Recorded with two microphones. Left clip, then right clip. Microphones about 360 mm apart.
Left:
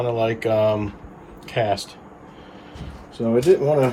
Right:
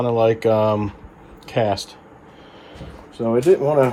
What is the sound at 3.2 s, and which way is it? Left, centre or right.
Speech, centre.